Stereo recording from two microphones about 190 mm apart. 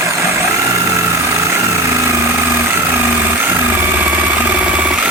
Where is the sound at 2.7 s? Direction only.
10° right (ahead or behind).